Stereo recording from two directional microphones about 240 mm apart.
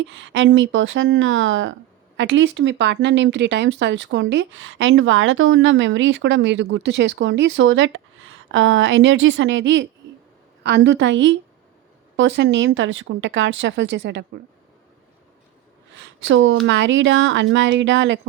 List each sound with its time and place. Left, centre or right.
0.0 s speech: right
15.9 s speech: right